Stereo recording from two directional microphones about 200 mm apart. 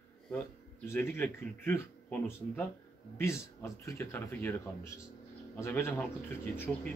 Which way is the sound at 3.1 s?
15° left (ahead or behind).